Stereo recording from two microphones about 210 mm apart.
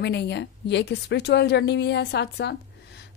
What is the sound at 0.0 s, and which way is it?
A woman's voice, 50° left (ahead or behind).